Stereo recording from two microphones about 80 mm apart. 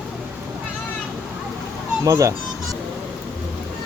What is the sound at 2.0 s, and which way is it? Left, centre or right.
Speech, right.